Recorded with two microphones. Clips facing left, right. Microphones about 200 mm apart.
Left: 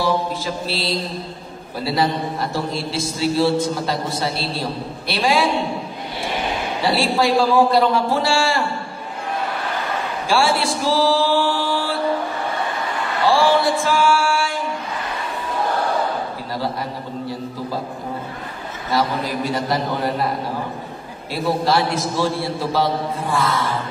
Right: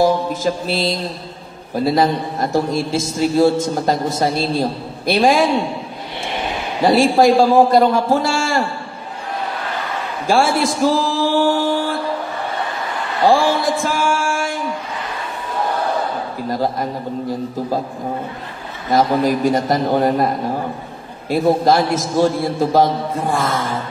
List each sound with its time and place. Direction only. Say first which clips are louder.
0.0 s mantra: right 5 dB; 45° right (ahead or behind)
1.9 s a man's voice: right 3 dB; 45° right (ahead or behind)
6.8 s a man's voice: right 7 dB; 45° right (ahead or behind)
10.2 s a sound: right 4 dB; 45° right (ahead or behind)
13.2 s a sound: right 2 dB; 45° right (ahead or behind)
16.4 s a man's voice: right 8 dB; 45° right (ahead or behind)
18.9 s a man's voice: right 6 dB; 45° right (ahead or behind)
21.3 s a man's voice: right 6 dB; 50° right (ahead or behind)